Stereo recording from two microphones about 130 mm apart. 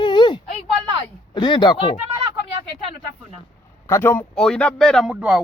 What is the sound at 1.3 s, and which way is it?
Speech, 35° left (ahead or behind).